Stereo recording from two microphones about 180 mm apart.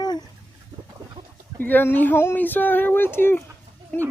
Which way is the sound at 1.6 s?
10° left (ahead or behind).